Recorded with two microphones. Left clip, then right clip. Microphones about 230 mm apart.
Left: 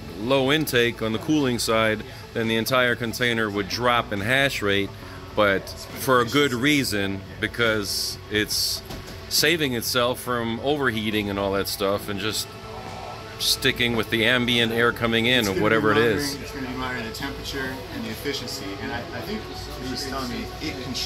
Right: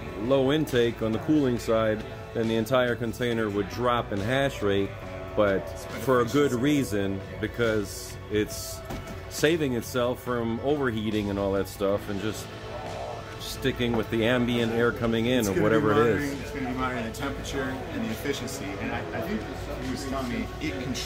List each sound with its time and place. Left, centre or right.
0.3 s speech: centre
8.5 s speech: centre
9.4 s speech: centre
13.6 s speech: centre